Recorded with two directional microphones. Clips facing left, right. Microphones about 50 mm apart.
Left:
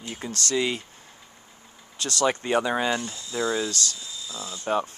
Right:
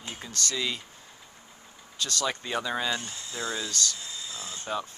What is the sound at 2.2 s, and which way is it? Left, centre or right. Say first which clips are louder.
Speech: left 9 dB; left.